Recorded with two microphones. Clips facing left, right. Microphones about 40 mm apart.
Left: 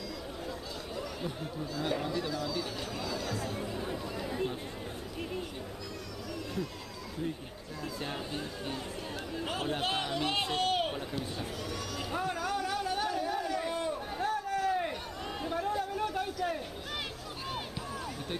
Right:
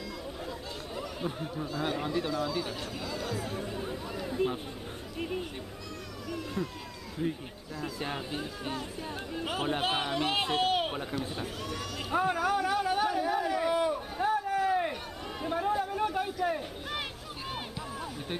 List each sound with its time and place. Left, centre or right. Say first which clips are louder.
0.9 s speech: right 3 dB; centre
3.8 s chatter: even; centre
6.3 s cat: right 3 dB; centre
7.8 s speech: right 2 dB; centre
11.3 s a sound: right 1 dB; centre